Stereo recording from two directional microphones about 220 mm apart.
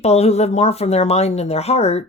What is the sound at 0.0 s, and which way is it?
Speech, 30° left (ahead or behind).